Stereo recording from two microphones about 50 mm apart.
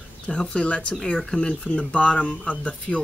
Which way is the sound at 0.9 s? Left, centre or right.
Centre.